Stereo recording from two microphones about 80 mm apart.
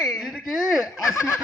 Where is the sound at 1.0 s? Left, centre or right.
Left.